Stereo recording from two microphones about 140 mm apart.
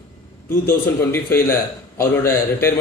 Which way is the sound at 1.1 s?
15° left (ahead or behind).